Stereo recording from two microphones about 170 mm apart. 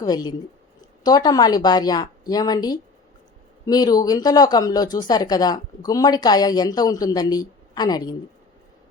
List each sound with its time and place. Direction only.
0.0 s speech: 25° left (ahead or behind)